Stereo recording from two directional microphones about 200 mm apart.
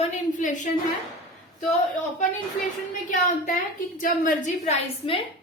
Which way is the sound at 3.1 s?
40° left (ahead or behind).